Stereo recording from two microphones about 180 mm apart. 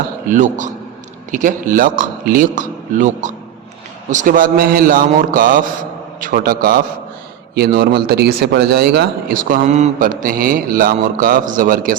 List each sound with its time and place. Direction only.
0.3 s a man's voice: 45° right (ahead or behind); by 9.4 s 65° right (ahead or behind)
9.4 s a man's voice: 50° right (ahead or behind)